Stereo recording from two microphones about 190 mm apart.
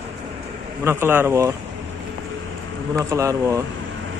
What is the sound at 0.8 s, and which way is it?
Speech, 10° right (ahead or behind).